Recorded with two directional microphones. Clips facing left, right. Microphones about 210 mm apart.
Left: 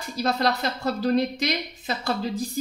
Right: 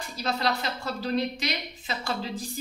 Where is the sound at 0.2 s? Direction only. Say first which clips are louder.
Left 5 dB; 40° left (ahead or behind).